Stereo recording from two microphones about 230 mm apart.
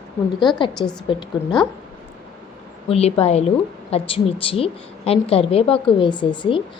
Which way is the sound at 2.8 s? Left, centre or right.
Left.